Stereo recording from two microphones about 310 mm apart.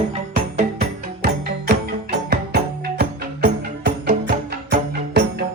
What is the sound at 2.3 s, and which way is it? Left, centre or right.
Music, right.